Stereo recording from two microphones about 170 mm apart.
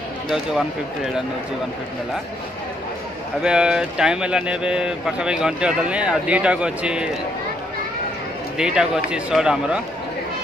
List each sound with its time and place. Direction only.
0.3 s speech: 5° right (ahead or behind)
3.4 s speech: 5° right (ahead or behind)
8.5 s speech: 5° right (ahead or behind)